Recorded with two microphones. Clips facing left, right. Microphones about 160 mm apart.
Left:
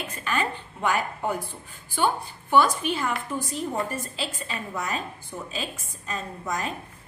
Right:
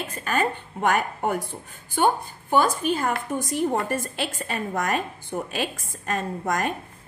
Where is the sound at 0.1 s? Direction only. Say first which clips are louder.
Right 4 dB; 45° right (ahead or behind).